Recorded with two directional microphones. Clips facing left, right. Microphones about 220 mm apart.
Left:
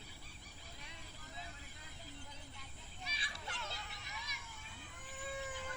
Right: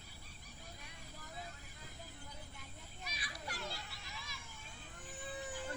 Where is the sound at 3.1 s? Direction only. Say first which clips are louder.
Right 2 dB; 25° left (ahead or behind).